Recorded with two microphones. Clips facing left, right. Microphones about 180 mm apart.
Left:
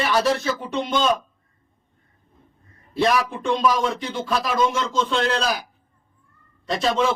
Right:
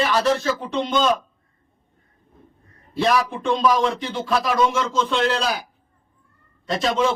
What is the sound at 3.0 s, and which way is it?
Speech, centre (ahead or behind).